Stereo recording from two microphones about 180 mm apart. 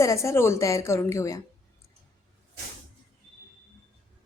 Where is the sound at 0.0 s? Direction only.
15° left (ahead or behind).